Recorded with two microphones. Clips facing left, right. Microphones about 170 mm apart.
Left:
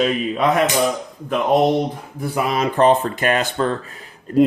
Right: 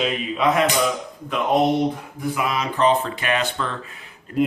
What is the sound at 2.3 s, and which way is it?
Speech, 40° left (ahead or behind).